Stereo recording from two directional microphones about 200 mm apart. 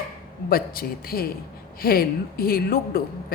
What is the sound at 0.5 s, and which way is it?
A woman's voice, 45° left (ahead or behind).